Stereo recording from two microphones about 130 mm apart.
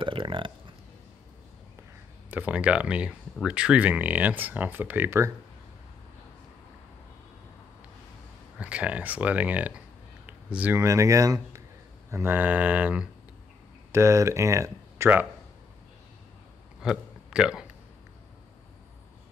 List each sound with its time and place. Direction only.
0.0 s burping: 40° right (ahead or behind)
2.3 s speech: 10° right (ahead or behind)
8.5 s speech: 10° right (ahead or behind)
13.9 s speech: 20° right (ahead or behind)
16.8 s a sound: 5° right (ahead or behind)